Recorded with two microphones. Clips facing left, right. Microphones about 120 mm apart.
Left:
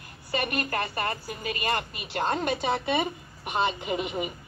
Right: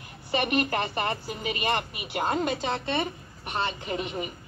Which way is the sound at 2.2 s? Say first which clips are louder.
Even; 5° right (ahead or behind).